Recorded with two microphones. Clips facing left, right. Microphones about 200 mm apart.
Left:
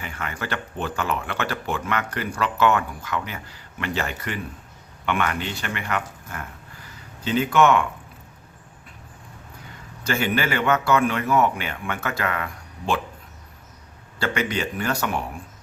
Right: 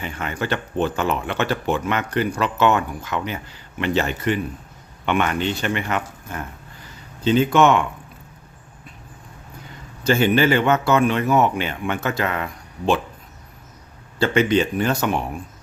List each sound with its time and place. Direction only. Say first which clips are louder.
0.0 s speech: right 5 dB; 25° right (ahead or behind)
10.1 s speech: right 7 dB; 25° right (ahead or behind)
14.2 s speech: right 7 dB; 25° right (ahead or behind)